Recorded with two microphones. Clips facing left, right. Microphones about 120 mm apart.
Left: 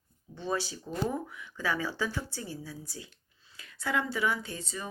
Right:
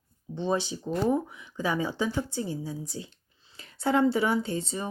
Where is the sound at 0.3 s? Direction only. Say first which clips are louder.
Right 5 dB; 20° right (ahead or behind).